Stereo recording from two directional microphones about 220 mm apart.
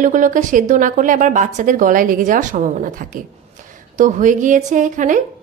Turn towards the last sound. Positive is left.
turn(degrees=-35)  # may be behind; listen again after turning